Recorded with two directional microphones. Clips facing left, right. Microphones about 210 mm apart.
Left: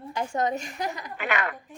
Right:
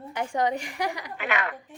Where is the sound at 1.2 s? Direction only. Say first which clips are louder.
Left 1 dB; 50° left (ahead or behind).